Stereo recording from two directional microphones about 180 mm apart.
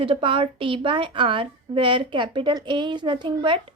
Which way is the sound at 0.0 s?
30° right (ahead or behind).